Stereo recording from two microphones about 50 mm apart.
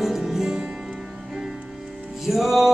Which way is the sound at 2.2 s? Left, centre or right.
Centre.